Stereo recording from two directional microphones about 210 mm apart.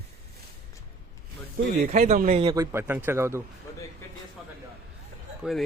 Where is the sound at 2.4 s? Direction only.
15° right (ahead or behind).